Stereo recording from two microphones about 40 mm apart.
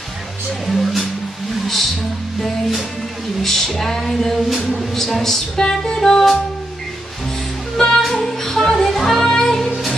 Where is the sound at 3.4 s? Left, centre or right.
Centre.